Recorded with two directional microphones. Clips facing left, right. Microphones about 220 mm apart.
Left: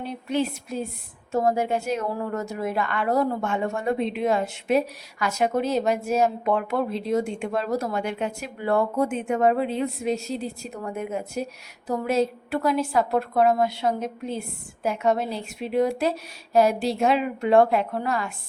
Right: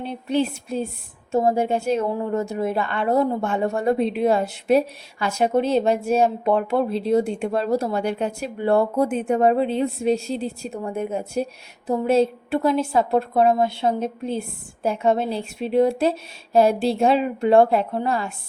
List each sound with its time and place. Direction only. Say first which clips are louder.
0.0 s a woman's voice: right 3 dB; 30° right (ahead or behind)